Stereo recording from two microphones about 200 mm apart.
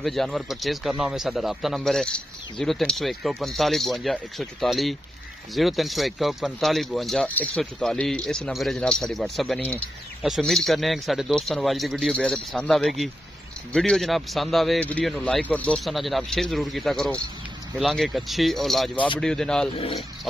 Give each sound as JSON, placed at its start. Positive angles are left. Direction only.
{"t": 0.0, "sound": "speech", "side_deg": 0}